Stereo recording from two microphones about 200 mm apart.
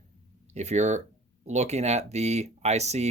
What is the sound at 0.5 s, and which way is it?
Speech, 35° right (ahead or behind).